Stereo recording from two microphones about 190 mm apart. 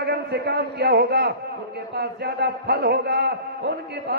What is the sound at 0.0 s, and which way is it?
A man's voice, 60° right (ahead or behind).